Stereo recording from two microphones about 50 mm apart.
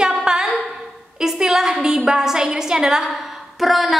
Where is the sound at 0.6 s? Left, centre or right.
Centre.